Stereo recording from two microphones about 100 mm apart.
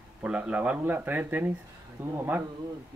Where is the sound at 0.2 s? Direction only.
10° right (ahead or behind).